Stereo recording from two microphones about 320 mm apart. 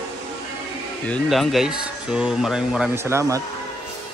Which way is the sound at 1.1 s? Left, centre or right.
Centre.